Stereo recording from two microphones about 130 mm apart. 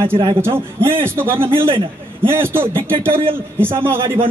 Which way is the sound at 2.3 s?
20° right (ahead or behind).